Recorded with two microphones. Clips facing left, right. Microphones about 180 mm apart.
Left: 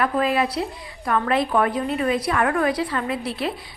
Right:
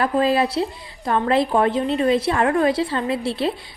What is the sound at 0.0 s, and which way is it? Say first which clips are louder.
A woman's voice: right 3 dB; 30° right (ahead or behind).